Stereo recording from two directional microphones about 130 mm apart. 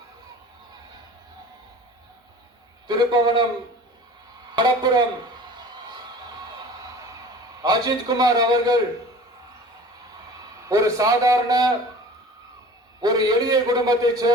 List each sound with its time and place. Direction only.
2.8 s a man's voice: 35° right (ahead or behind)
4.5 s a man's voice: 35° right (ahead or behind)
7.6 s a man's voice: 30° right (ahead or behind)
10.7 s a man's voice: 25° right (ahead or behind)
13.0 s a man's voice: 30° right (ahead or behind)